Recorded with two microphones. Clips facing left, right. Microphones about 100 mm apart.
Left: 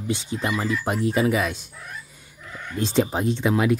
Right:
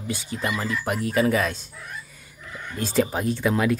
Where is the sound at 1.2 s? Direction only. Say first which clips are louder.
Right 4 dB; 10° left (ahead or behind).